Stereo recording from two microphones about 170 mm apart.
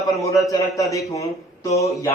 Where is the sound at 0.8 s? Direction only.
20° left (ahead or behind).